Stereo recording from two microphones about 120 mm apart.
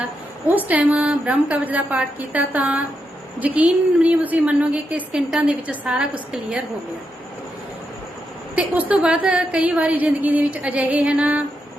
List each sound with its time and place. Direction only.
0.4 s a woman's voice: 15° right (ahead or behind)
8.5 s a woman's voice: 15° right (ahead or behind)